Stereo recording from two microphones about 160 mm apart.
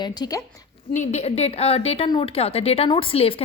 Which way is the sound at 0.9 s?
45° left (ahead or behind).